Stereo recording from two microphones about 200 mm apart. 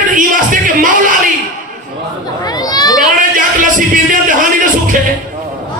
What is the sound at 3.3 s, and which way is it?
Speech, 40° right (ahead or behind).